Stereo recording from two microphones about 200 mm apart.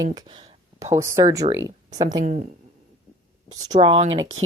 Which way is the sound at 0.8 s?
15° right (ahead or behind).